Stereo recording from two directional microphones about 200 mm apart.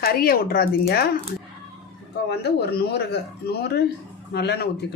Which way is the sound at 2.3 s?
55° left (ahead or behind).